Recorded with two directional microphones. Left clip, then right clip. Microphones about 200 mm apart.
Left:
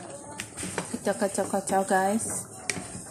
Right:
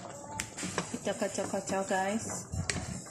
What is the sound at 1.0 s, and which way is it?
Speech, 25° left (ahead or behind).